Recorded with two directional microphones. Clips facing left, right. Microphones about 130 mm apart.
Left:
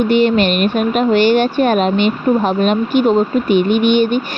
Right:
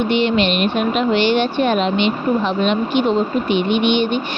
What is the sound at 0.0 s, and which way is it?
Speech, 45° left (ahead or behind).